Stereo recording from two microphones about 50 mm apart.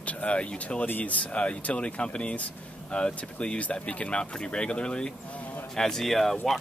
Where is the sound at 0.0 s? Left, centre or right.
Left.